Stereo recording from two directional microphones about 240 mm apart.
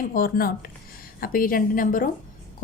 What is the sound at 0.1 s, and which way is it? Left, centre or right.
A woman's voice, left.